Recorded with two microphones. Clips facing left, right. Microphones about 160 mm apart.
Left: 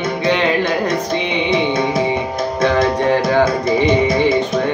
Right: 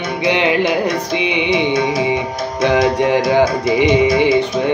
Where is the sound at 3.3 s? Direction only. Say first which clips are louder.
Right 1 dB; 15° right (ahead or behind).